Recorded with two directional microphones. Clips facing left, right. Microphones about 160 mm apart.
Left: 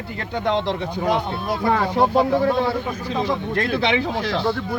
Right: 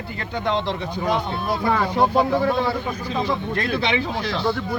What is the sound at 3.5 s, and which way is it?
Speech, 85° left.